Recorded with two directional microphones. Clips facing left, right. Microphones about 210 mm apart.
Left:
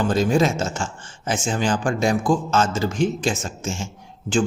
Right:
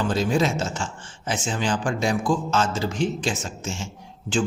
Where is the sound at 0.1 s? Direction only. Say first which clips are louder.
Left 3 dB; 45° left (ahead or behind).